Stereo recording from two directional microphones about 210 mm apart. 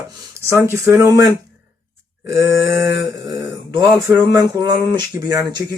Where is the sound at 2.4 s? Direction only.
15° right (ahead or behind).